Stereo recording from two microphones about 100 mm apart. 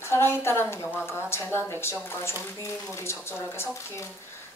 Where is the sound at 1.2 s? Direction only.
25° left (ahead or behind).